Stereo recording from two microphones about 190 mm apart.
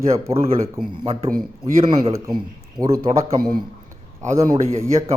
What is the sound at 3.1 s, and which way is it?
Speech, 35° right (ahead or behind).